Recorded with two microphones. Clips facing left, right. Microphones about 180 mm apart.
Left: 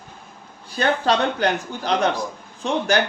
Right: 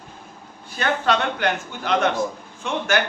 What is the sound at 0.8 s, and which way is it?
A man's voice, 35° left (ahead or behind).